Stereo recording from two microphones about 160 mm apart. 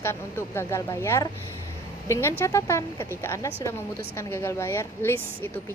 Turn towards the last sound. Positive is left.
turn(degrees=15)  # may be behind; listen again after turning